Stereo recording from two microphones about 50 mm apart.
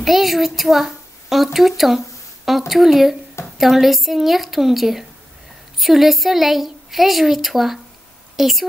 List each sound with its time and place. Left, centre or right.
0.0 s a woman's voice: centre